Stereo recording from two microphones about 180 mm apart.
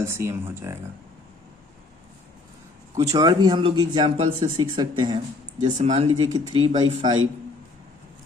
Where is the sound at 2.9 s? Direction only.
20° right (ahead or behind).